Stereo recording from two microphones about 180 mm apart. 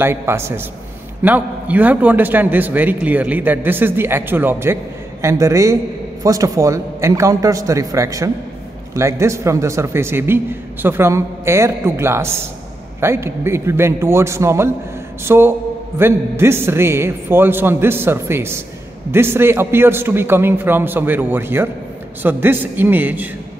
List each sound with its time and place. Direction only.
0.0 s a man's voice: 15° right (ahead or behind)